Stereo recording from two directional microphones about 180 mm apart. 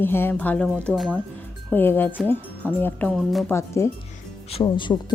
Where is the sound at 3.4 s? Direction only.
15° left (ahead or behind).